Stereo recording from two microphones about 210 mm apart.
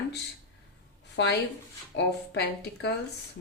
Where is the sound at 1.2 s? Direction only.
55° left (ahead or behind).